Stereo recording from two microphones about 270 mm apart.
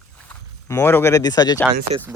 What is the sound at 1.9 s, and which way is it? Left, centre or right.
Speech, right.